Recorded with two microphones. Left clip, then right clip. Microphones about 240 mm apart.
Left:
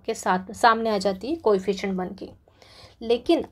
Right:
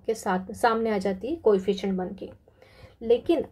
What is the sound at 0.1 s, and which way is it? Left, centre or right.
Speech, centre.